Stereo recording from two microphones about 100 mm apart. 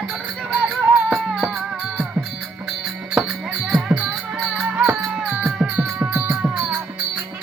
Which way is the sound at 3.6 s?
Centre (ahead or behind).